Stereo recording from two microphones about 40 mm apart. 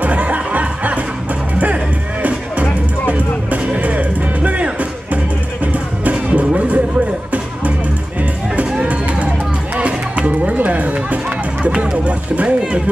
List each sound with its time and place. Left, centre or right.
0.0 s music: right
3.1 s music: right
5.7 s music: right
9.8 s music: right